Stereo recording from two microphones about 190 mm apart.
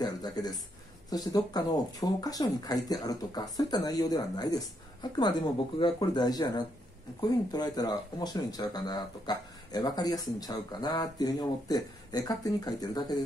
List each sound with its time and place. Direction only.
0.0 s speech: 20° left (ahead or behind)